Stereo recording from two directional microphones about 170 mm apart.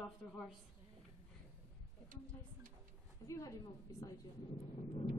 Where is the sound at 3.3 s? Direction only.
20° left (ahead or behind).